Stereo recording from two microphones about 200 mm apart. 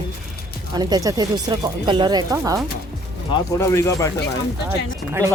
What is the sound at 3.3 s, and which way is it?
Speech, 15° left (ahead or behind).